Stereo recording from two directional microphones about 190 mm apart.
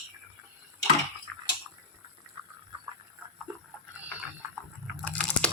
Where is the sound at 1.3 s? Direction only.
5° left (ahead or behind).